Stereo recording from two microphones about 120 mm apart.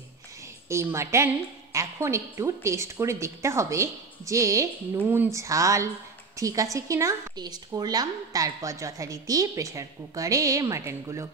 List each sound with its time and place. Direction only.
0.7 s speech: 25° right (ahead or behind)
4.9 s speech: 15° right (ahead or behind)